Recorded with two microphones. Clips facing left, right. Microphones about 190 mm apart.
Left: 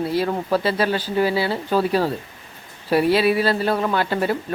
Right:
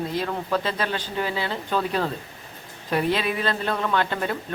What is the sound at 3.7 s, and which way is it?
Speech, 30° left (ahead or behind).